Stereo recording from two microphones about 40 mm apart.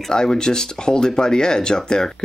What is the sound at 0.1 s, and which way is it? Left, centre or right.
Speech, centre.